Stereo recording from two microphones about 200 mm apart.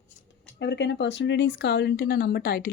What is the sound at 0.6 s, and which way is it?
Speech, 60° left (ahead or behind).